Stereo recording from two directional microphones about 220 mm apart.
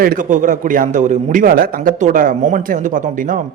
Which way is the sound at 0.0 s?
40° right (ahead or behind).